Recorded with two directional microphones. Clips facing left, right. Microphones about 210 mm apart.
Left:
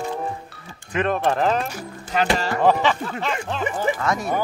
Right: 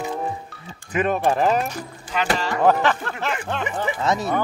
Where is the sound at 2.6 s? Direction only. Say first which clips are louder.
Right 1 dB; centre (ahead or behind).